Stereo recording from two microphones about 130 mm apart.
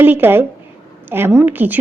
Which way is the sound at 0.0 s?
15° right (ahead or behind).